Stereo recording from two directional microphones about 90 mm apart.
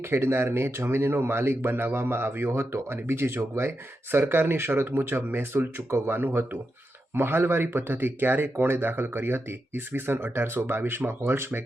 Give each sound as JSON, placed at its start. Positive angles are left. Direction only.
{"t": 0.0, "sound": "speech", "side_deg": -25}